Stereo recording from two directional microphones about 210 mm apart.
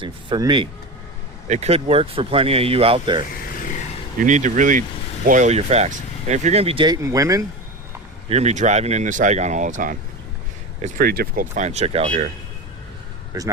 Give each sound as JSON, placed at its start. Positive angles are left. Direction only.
{"t": 0.0, "sound": "speech", "side_deg": -20}
{"t": 1.5, "sound": "speech", "side_deg": -30}
{"t": 4.2, "sound": "speech", "side_deg": -35}
{"t": 8.3, "sound": "speech", "side_deg": -30}
{"t": 11.0, "sound": "speech", "side_deg": -45}
{"t": 13.3, "sound": "speech", "side_deg": -15}